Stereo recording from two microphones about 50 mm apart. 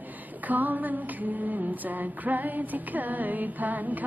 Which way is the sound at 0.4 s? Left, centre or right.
Right.